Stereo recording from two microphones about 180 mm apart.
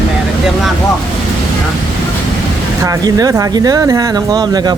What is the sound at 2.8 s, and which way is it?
Speech, 20° right (ahead or behind).